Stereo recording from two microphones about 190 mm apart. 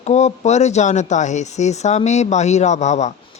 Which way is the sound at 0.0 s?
35° left (ahead or behind).